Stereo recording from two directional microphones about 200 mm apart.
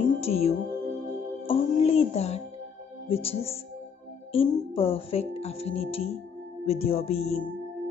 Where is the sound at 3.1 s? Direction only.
30° left (ahead or behind).